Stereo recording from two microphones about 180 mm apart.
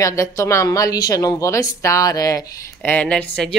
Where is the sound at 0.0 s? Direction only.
15° left (ahead or behind).